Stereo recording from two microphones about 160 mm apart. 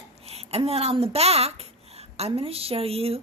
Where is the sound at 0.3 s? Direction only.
40° right (ahead or behind).